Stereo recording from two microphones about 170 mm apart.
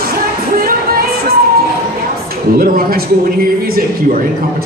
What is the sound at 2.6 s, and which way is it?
A man's voice, 60° right (ahead or behind).